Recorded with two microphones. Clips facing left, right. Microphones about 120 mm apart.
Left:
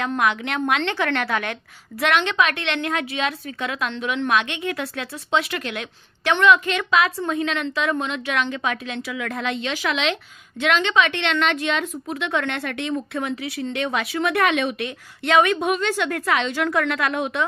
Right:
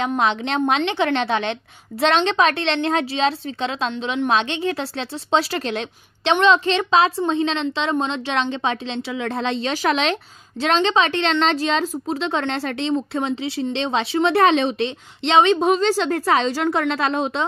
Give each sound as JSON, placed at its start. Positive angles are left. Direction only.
{"t": 0.0, "sound": "a woman's voice", "side_deg": -25}